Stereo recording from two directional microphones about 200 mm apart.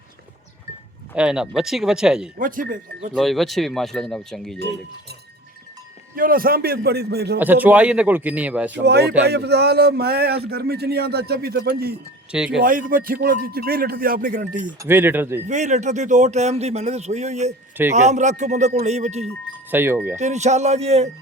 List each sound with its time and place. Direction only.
1.1 s speech: 5° right (ahead or behind)
2.4 s a man's voice: 45° right (ahead or behind)
3.2 s speech: centre (ahead or behind)
6.1 s a man's voice: 45° right (ahead or behind)
7.3 s speech: 10° right (ahead or behind)
8.8 s a man's voice: 55° right (ahead or behind)
12.3 s speech: 5° right (ahead or behind)
12.6 s a man's voice: 45° right (ahead or behind)
14.8 s speech: 10° right (ahead or behind)
15.4 s speech: 35° right (ahead or behind)
19.7 s speech: 10° right (ahead or behind)
20.1 s speech: 35° right (ahead or behind)